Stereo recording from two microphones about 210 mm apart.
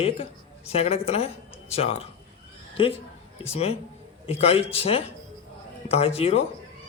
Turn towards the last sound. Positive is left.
turn(degrees=30)  # may be behind; listen again after turning